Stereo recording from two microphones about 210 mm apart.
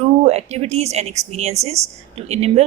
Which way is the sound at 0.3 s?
30° right (ahead or behind).